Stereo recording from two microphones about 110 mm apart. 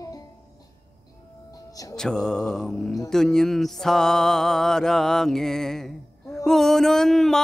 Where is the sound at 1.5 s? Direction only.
30° left (ahead or behind).